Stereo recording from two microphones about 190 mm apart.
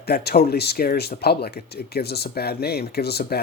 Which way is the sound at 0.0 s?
60° left (ahead or behind).